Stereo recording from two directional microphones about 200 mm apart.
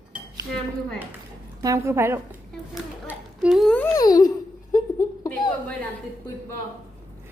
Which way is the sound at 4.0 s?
20° left (ahead or behind).